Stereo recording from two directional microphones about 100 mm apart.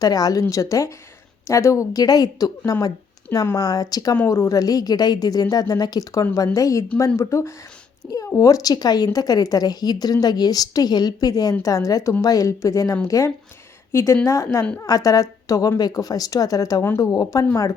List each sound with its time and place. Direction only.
0.0 s a woman's voice: 40° left (ahead or behind)
4.1 s a woman's voice: 25° left (ahead or behind)
8.0 s speech: 5° left (ahead or behind)
8.4 s a woman's voice: 35° left (ahead or behind)